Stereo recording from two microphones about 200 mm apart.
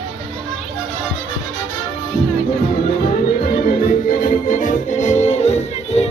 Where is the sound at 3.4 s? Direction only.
45° left (ahead or behind).